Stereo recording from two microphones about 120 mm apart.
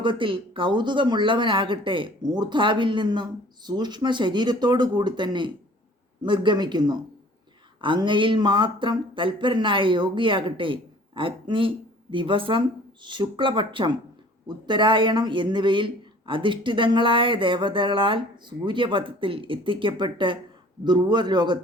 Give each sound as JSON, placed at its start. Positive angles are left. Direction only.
{"t": 0.0, "sound": "speech", "side_deg": -45}